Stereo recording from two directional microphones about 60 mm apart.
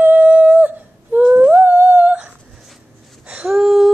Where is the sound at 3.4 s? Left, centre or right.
Centre.